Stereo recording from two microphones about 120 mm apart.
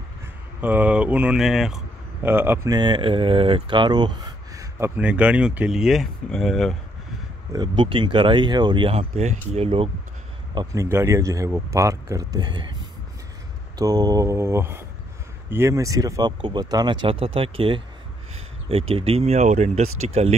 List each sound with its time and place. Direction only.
0.6 s speech: 15° right (ahead or behind)
2.2 s speech: 20° right (ahead or behind)
2.7 s speech: 40° right (ahead or behind)
4.7 s speech: 15° right (ahead or behind); by 6.8 s centre (ahead or behind)
7.5 s speech: 40° right (ahead or behind); by 9.7 s 70° right (ahead or behind)
10.7 s speech: 20° right (ahead or behind)
13.7 s speech: 30° right (ahead or behind); by 20.3 s 65° right (ahead or behind)